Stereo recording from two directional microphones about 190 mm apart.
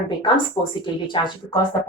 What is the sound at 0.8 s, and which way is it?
Speech, 25° left (ahead or behind).